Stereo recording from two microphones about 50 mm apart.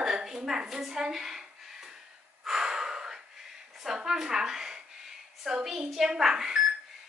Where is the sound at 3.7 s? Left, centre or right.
Centre.